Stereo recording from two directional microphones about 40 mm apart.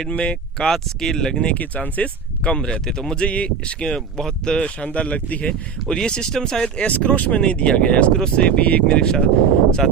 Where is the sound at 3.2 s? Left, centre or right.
Left.